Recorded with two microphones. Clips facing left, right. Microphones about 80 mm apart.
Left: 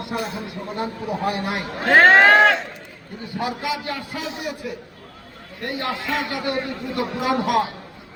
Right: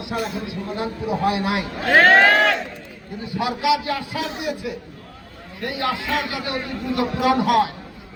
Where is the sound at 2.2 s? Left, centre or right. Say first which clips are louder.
Left 2 dB; left.